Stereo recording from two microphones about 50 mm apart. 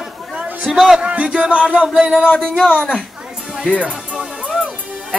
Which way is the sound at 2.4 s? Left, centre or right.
Centre.